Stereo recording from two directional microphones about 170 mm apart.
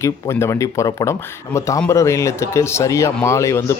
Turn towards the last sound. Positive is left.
turn(degrees=15)  # may be behind; listen again after turning